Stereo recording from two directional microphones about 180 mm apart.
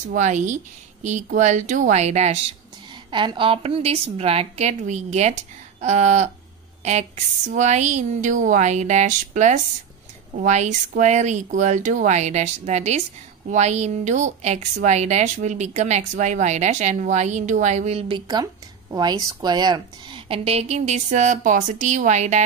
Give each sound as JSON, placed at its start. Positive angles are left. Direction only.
{"t": 0.1, "sound": "a woman's voice", "side_deg": -40}
{"t": 3.1, "sound": "a woman's voice", "side_deg": -25}